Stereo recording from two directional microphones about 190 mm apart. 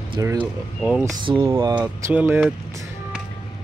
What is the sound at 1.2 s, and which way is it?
Speech, 25° right (ahead or behind).